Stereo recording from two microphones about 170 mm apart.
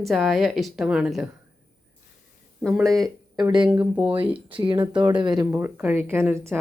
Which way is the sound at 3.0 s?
25° right (ahead or behind).